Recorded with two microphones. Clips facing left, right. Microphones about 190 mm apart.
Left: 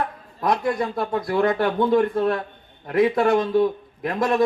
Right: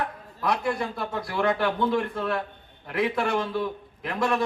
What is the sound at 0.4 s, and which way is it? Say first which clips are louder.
Speech: left 4 dB; 40° left (ahead or behind).